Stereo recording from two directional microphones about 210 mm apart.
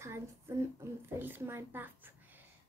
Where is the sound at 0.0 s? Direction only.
10° right (ahead or behind).